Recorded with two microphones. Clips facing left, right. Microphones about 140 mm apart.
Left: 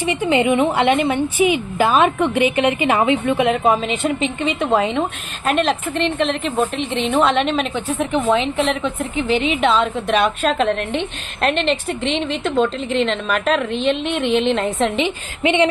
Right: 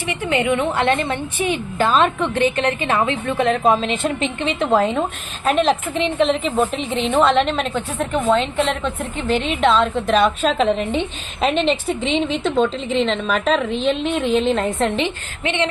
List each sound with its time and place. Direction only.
0.1 s a woman's voice: 20° left (ahead or behind)
3.4 s a woman's voice: 5° left (ahead or behind)
15.4 s a woman's voice: 20° left (ahead or behind)